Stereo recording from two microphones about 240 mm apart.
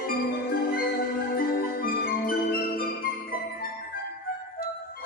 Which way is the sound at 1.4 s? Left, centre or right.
Left.